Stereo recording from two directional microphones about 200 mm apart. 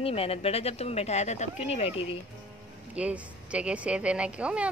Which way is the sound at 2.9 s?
5° right (ahead or behind).